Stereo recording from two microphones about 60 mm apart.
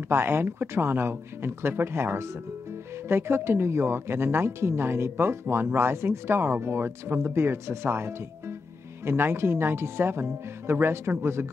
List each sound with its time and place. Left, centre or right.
0.1 s speech: right